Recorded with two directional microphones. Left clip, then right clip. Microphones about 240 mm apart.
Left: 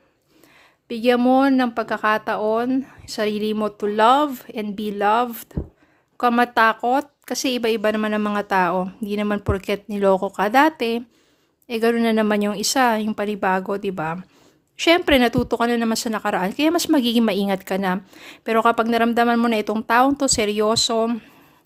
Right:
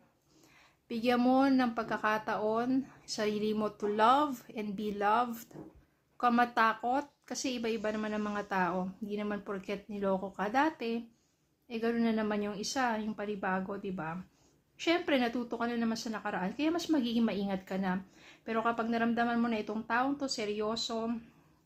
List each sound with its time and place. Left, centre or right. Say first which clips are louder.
0.9 s a woman's voice: left 12 dB; left